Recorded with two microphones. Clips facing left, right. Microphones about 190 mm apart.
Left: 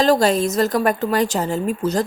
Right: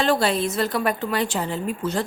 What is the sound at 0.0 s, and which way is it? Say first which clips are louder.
A woman's voice: left 5 dB; 40° left (ahead or behind).